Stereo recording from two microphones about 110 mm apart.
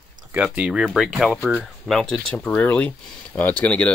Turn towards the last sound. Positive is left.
turn(degrees=10)  # may be behind; listen again after turning